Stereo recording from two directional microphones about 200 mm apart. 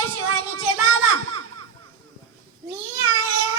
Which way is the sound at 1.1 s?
90° right.